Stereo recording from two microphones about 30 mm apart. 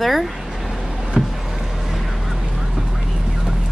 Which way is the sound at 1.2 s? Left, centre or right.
Right.